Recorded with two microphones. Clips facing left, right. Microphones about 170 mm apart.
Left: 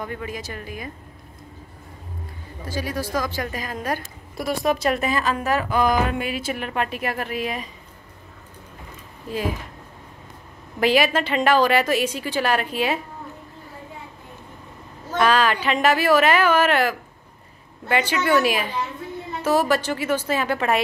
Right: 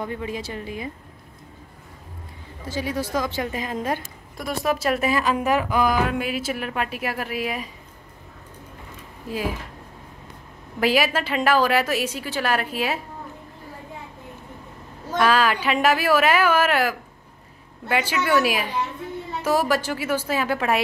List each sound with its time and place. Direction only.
0.0 s a woman's voice: 25° right (ahead or behind)
2.7 s a woman's voice: 20° right (ahead or behind)
4.4 s speech: centre (ahead or behind)
10.8 s speech: 5° right (ahead or behind)
15.1 s speech: 5° right (ahead or behind)